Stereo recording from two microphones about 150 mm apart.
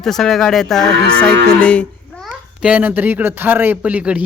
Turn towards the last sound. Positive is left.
turn(degrees=-10)  # may be behind; listen again after turning